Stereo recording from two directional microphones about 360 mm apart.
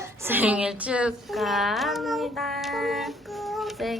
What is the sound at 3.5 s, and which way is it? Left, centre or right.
Child singing, centre.